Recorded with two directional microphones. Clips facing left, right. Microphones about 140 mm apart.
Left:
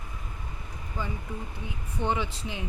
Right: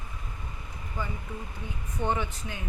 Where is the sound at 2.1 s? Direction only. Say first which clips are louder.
Left 1 dB; 20° left (ahead or behind).